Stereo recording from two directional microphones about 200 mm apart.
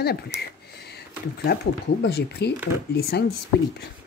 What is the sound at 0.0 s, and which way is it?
Speech, 50° left (ahead or behind).